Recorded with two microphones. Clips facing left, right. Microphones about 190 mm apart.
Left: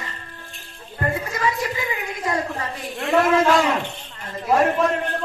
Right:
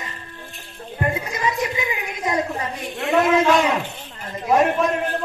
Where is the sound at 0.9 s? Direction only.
20° right (ahead or behind).